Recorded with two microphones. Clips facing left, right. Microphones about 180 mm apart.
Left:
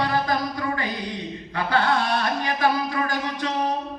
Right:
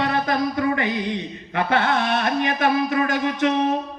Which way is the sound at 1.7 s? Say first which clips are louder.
Even; 20° right (ahead or behind).